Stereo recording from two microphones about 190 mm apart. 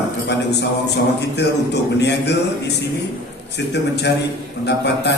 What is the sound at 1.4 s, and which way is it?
A man's voice, 65° left (ahead or behind).